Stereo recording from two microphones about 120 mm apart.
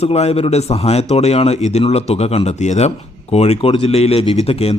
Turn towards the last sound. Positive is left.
turn(degrees=55)  # may be behind; listen again after turning